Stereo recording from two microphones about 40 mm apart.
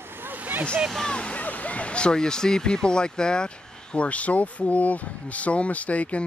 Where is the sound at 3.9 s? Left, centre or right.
Left.